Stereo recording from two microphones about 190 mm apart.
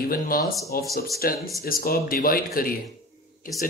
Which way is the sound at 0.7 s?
50° left (ahead or behind).